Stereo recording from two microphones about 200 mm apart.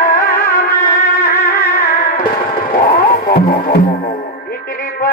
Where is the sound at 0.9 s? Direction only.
45° left (ahead or behind).